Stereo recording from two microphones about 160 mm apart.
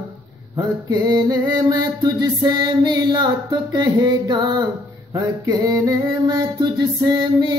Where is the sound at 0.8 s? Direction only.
25° right (ahead or behind).